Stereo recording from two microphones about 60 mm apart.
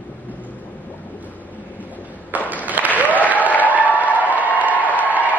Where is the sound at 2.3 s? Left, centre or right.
Right.